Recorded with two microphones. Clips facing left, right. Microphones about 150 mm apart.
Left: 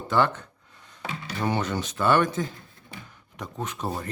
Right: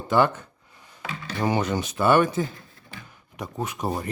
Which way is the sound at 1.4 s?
10° right (ahead or behind).